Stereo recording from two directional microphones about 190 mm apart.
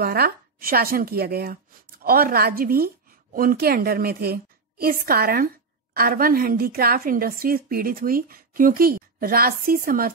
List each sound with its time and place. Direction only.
0.0 s a woman's voice: 50° right (ahead or behind)